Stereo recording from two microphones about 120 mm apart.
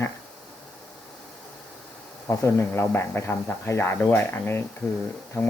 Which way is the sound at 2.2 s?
20° left (ahead or behind).